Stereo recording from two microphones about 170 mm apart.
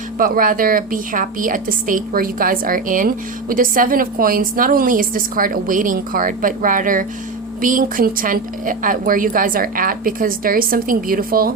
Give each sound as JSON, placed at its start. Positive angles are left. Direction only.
{"t": 0.2, "sound": "a woman's voice", "side_deg": -55}